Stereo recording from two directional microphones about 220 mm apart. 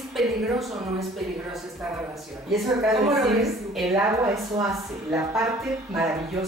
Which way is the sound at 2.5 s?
Centre (ahead or behind).